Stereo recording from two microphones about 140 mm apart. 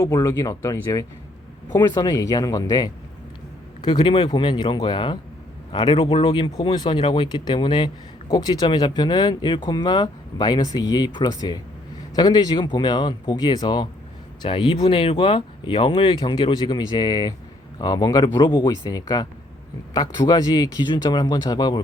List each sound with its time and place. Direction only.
0.0 s speech: 25° left (ahead or behind)